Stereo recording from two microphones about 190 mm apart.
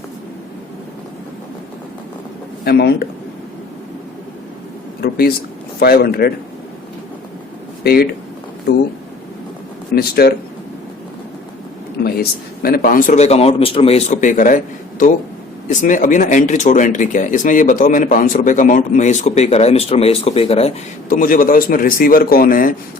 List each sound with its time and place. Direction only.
2.6 s speech: 55° left (ahead or behind)
4.9 s a sound: 55° left (ahead or behind)
5.8 s speech: 55° left (ahead or behind)
7.9 s speech: 55° left (ahead or behind)
9.9 s speech: 55° left (ahead or behind)
12.6 s speech: 50° left (ahead or behind); by 20.7 s 30° left (ahead or behind)
21.1 s speech: 45° left (ahead or behind)